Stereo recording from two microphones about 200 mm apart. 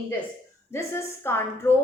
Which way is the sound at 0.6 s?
15° left (ahead or behind).